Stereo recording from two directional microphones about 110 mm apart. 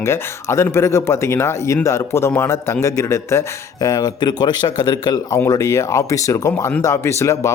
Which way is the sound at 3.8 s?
35° left (ahead or behind).